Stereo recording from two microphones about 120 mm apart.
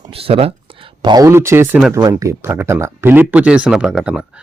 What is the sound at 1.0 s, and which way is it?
Speech, 35° right (ahead or behind).